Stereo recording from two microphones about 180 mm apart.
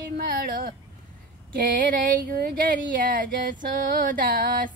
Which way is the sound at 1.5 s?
50° right (ahead or behind).